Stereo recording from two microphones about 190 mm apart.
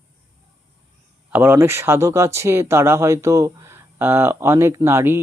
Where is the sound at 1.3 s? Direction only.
10° right (ahead or behind).